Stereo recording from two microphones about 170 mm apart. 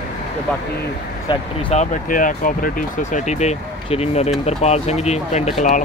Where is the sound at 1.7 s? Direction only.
45° left (ahead or behind).